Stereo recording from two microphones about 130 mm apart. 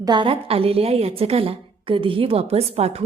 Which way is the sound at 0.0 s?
35° right (ahead or behind).